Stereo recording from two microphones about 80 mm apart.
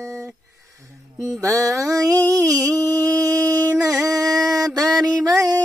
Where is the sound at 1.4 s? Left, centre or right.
Right.